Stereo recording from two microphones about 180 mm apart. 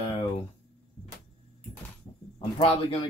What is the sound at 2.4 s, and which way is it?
Speech, 30° left (ahead or behind).